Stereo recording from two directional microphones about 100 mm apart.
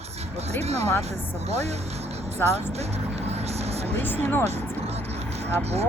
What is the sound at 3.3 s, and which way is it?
Vehicle, 90° right.